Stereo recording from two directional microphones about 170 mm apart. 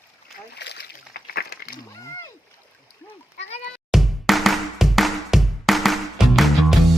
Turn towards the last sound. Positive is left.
turn(degrees=0)  # may be behind; listen again after turning